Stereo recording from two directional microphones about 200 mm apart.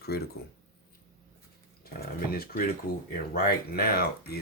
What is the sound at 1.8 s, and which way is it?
Speech, 50° left (ahead or behind).